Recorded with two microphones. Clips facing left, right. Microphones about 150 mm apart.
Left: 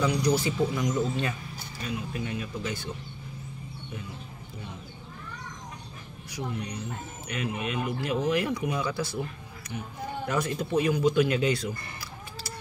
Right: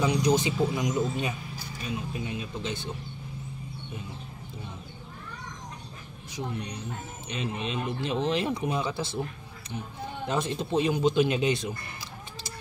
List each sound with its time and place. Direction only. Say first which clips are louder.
0.0 s speech: right 1 dB; 20° right (ahead or behind)
6.3 s speech: left 1 dB; 20° right (ahead or behind)
10.2 s speech: even; 25° right (ahead or behind)